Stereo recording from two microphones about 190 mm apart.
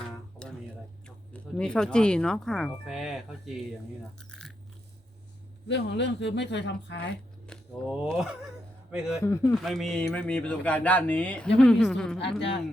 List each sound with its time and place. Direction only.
0.4 s music: 5° left (ahead or behind)
1.0 s speech: 5° left (ahead or behind)
4.3 s a sound: 5° left (ahead or behind)
5.6 s speech: 65° left (ahead or behind)
7.4 s speech: 5° left (ahead or behind)
9.2 s speech: 15° left (ahead or behind)
9.6 s speech: centre (ahead or behind)